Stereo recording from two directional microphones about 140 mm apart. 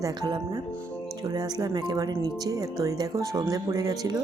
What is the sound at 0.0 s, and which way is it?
Speech, 30° right (ahead or behind).